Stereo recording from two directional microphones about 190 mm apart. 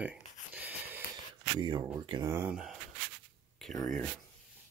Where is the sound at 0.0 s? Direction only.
10° right (ahead or behind).